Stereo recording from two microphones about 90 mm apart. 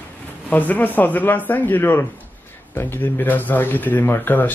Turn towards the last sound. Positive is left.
turn(degrees=20)  # may be behind; listen again after turning